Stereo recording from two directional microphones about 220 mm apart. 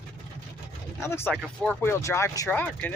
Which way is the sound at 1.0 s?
10° left (ahead or behind).